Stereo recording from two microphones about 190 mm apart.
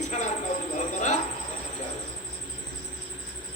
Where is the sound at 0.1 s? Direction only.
35° left (ahead or behind).